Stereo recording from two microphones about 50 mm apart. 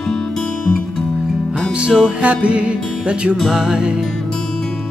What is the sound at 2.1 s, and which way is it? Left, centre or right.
Music, right.